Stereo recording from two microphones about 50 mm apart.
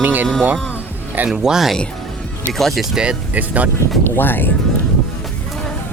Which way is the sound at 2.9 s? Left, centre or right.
Centre.